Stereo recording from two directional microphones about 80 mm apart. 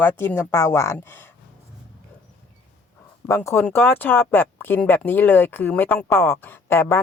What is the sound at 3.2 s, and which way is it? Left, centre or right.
Speech, left.